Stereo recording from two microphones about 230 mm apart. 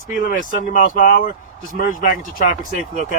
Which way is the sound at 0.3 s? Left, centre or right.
Left.